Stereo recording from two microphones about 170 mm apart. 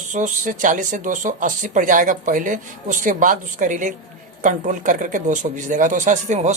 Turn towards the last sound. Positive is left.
turn(degrees=-45)  # may be behind; listen again after turning